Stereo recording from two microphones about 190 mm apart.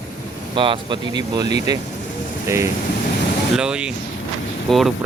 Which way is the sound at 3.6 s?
5° right (ahead or behind).